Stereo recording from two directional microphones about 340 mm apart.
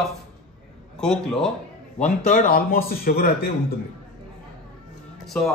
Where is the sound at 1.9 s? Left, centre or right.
Left.